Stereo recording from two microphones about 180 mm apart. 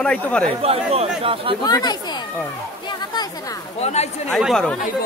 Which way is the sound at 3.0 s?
20° left (ahead or behind).